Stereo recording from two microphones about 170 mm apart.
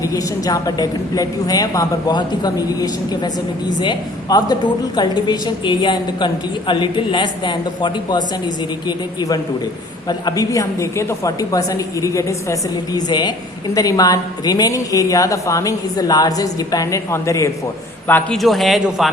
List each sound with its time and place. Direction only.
0.0 s a woman's voice: 20° left (ahead or behind)
18.1 s a man's voice: centre (ahead or behind)